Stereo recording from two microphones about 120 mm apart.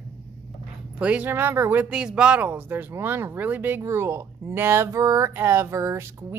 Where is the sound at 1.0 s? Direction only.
10° right (ahead or behind).